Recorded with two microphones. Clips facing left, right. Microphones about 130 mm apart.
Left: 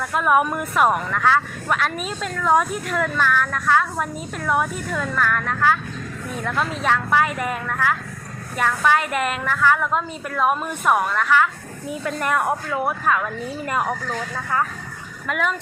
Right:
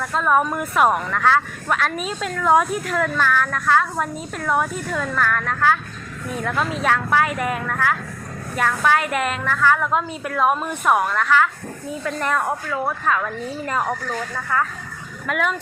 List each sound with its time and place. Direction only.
0.1 s a woman's voice: 10° left (ahead or behind)
0.6 s a woman's voice: centre (ahead or behind)
11.9 s a woman's voice: 15° left (ahead or behind)
13.8 s a woman's voice: centre (ahead or behind)
14.5 s speech: 25° left (ahead or behind)
15.3 s a woman's voice: centre (ahead or behind)